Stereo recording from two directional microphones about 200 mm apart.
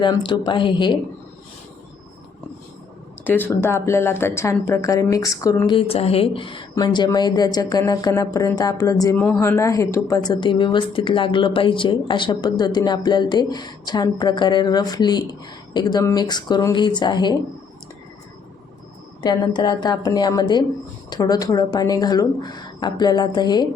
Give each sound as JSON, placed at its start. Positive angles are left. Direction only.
{"t": 0.0, "sound": "speech", "side_deg": 20}
{"t": 3.2, "sound": "speech", "side_deg": 10}
{"t": 19.2, "sound": "speech", "side_deg": 20}